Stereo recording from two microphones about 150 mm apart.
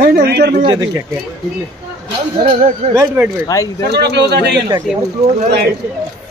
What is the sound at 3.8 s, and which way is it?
Speech, 90° right.